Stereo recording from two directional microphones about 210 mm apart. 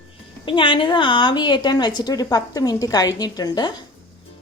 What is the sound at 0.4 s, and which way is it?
A woman's voice, 25° left (ahead or behind).